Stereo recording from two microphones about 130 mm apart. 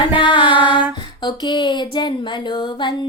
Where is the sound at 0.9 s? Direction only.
35° left (ahead or behind).